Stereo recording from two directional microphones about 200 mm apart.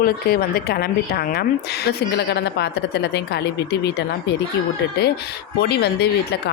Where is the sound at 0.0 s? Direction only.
50° left (ahead or behind).